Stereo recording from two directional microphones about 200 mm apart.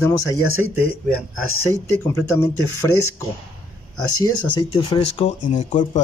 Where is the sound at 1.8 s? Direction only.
15° left (ahead or behind).